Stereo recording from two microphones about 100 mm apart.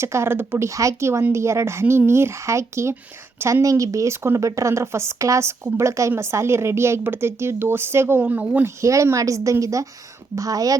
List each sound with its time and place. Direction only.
0.0 s speech: 25° right (ahead or behind)
0.7 s speech: 30° right (ahead or behind)
8.8 s speech: 30° right (ahead or behind)